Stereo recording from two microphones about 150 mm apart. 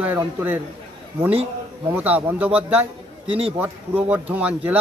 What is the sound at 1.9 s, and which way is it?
Speech, 10° right (ahead or behind).